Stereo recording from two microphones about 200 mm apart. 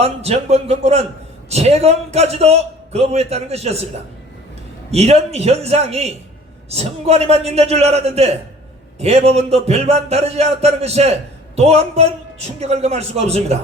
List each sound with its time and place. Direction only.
0.0 s a man's voice: 30° right (ahead or behind)
4.9 s a man's voice: 30° right (ahead or behind)